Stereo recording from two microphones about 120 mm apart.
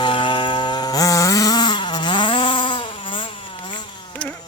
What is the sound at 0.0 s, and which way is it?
Chainsaw, 45° left (ahead or behind).